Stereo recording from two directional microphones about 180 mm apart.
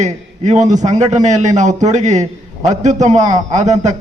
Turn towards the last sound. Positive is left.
turn(degrees=-40)  # may be behind; listen again after turning